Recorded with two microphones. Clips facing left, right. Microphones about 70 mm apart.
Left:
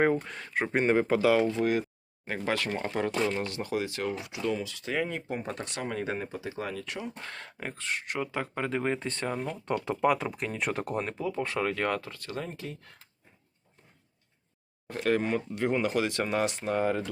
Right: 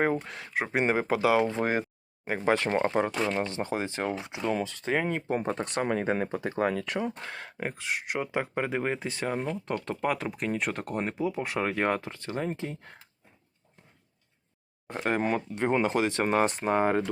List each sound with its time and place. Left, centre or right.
0.0 s speech: centre
1.5 s speech: right
2.2 s speech: centre
2.6 s speech: right
6.1 s speech: right
7.3 s speech: centre
11.0 s speech: centre; by 13.0 s right
14.8 s speech: right
16.6 s speech: right